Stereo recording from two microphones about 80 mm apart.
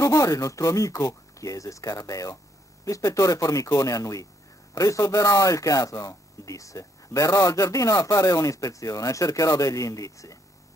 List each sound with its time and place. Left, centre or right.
0.0 s speech: left